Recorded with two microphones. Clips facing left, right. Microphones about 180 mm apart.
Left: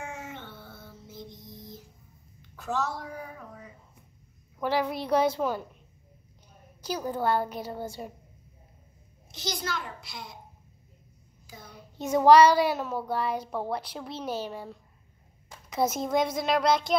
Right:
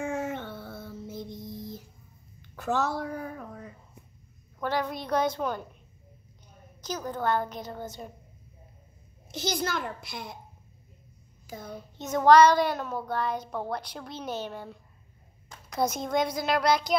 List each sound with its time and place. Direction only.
0.0 s music: 50° right (ahead or behind)
2.5 s a woman's voice: 60° right (ahead or behind)
4.6 s a woman's voice: 5° left (ahead or behind)
6.8 s a woman's voice: 10° left (ahead or behind)
9.3 s a child's voice: 55° right (ahead or behind)
11.4 s child singing: 50° right (ahead or behind)
12.1 s a woman's voice: 10° left (ahead or behind)